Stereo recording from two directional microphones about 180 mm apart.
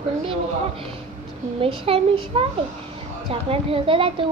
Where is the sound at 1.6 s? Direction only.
30° right (ahead or behind).